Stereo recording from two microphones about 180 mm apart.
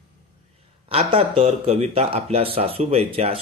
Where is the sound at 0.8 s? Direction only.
30° right (ahead or behind).